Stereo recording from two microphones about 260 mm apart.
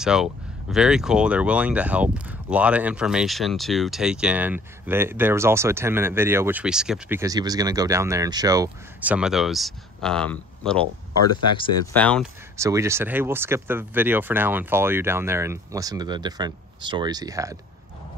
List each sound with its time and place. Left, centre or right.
0.0 s speech: centre
11.9 s speech: centre
12.5 s speech: centre